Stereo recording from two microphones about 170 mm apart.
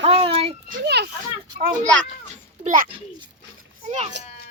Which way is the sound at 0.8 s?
80° right.